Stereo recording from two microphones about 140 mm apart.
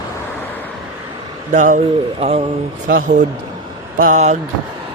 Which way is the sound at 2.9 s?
80° right.